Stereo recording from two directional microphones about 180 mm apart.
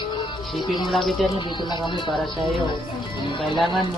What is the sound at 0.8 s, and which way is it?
Speech, centre (ahead or behind).